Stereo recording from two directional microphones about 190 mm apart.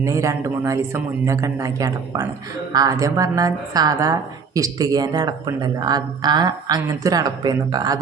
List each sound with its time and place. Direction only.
0.0 s a woman's voice: 15° right (ahead or behind)